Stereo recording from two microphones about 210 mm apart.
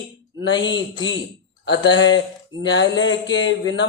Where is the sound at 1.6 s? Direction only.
60° left (ahead or behind).